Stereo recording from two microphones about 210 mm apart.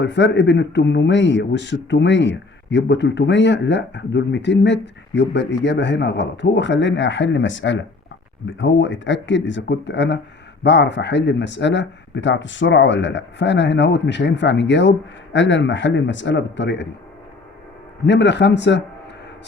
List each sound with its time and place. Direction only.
0.0 s speech: 60° left (ahead or behind)
18.0 s speech: 55° left (ahead or behind)